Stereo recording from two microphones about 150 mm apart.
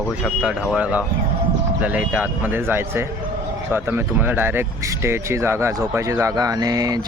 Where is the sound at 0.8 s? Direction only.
10° right (ahead or behind).